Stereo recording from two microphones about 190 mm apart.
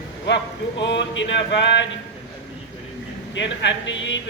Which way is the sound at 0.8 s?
70° left (ahead or behind).